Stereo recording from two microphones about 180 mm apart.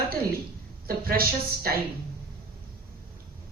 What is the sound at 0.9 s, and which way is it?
Speech, 55° right (ahead or behind).